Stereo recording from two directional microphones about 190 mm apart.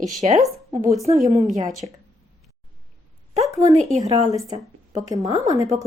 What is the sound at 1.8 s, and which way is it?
Speech, 25° right (ahead or behind).